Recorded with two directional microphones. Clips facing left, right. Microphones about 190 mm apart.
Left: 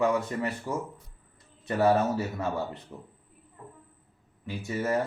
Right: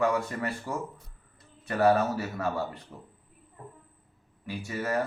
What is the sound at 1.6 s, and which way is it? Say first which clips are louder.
Speech: even; 20° left (ahead or behind).